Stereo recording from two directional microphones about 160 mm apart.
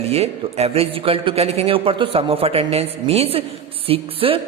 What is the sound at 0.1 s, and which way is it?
A woman's voice, 40° right (ahead or behind).